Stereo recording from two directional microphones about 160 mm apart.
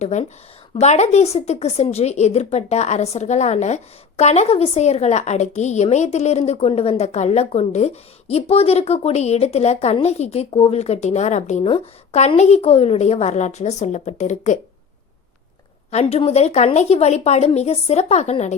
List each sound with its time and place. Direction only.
0.0 s a woman's voice: 45° left (ahead or behind)
15.9 s a woman's voice: 40° left (ahead or behind)